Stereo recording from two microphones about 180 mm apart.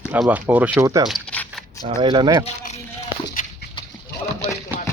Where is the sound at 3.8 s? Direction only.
30° left (ahead or behind).